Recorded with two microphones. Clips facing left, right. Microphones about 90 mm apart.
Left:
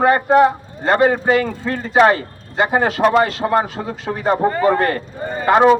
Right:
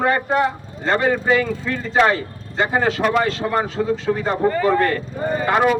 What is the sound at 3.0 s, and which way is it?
Speech, 30° left (ahead or behind).